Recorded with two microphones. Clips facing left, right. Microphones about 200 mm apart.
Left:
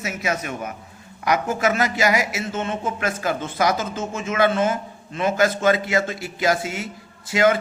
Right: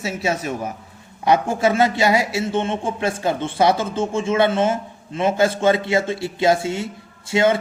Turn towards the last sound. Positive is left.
turn(degrees=-25)  # may be behind; listen again after turning